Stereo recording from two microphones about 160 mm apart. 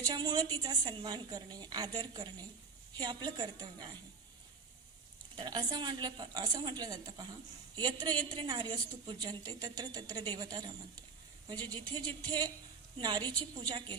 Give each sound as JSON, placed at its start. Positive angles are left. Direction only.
{"t": 0.1, "sound": "a woman's voice", "side_deg": -25}
{"t": 5.4, "sound": "a woman's voice", "side_deg": -25}